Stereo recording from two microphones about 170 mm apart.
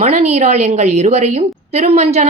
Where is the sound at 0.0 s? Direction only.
40° right (ahead or behind).